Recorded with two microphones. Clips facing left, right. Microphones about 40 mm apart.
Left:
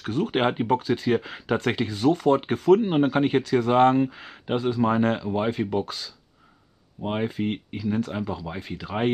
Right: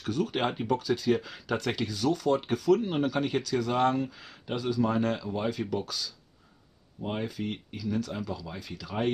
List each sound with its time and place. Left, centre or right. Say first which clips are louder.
0.0 s speech: left 5 dB; left